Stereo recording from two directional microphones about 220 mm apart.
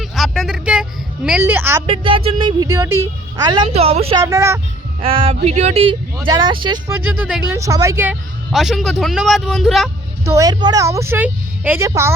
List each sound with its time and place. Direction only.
0.0 s a sound: centre (ahead or behind)
1.9 s a woman's voice: 25° right (ahead or behind)
4.2 s speech: 15° right (ahead or behind)
5.0 s a woman's voice: 25° right (ahead or behind)
6.8 s speech: 10° right (ahead or behind)
8.5 s a man's voice: centre (ahead or behind)
10.2 s speech: 15° right (ahead or behind)